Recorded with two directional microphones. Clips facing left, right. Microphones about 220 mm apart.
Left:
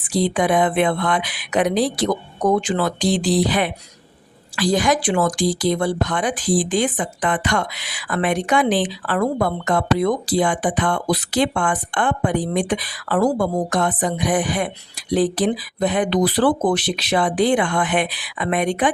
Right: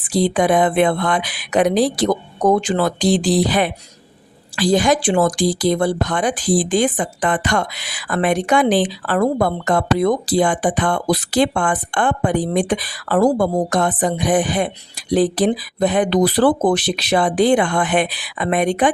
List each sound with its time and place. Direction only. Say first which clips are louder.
0.1 s speech: right 3 dB; 35° right (ahead or behind)